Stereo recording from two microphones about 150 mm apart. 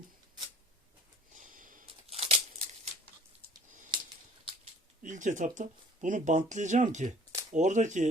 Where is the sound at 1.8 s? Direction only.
40° right (ahead or behind).